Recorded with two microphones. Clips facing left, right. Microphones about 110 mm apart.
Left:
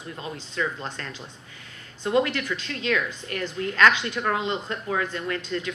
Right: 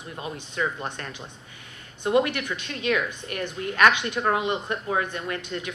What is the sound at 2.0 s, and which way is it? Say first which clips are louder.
A woman's voice: right 1 dB; 20° right (ahead or behind).